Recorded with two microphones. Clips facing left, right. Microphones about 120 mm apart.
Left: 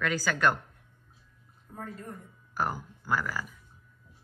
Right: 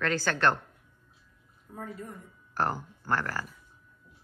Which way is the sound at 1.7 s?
5° right (ahead or behind).